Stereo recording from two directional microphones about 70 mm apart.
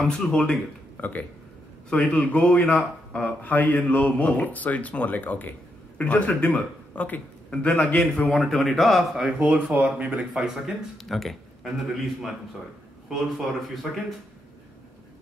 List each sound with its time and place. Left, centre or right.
0.0 s speech: centre
1.0 s speech: left
8.3 s speech: centre
9.2 s speech: centre
11.1 s a man's voice: centre